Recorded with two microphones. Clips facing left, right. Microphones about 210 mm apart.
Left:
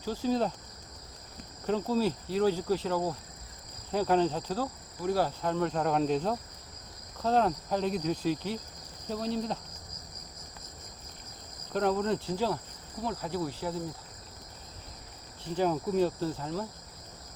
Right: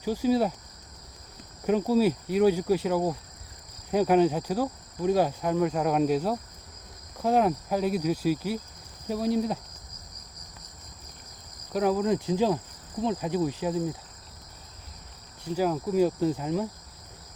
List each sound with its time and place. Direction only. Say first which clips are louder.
0.0 s speech: right 5 dB; 15° right (ahead or behind)
1.6 s speech: right 5 dB; 15° right (ahead or behind)
11.7 s speech: right 3 dB; 5° right (ahead or behind)
15.5 s speech: right 3 dB; 5° right (ahead or behind)